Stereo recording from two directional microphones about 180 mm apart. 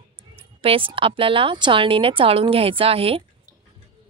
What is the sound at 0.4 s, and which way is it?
A woman's voice, 30° right (ahead or behind).